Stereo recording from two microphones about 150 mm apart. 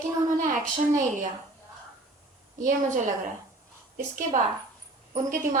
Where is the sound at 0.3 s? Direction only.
60° right (ahead or behind).